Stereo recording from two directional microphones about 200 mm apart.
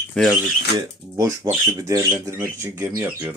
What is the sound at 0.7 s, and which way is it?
Speech, 15° right (ahead or behind).